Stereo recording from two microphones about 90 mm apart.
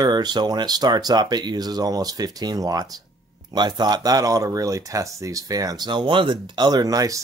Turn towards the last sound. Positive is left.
turn(degrees=-45)  # may be behind; listen again after turning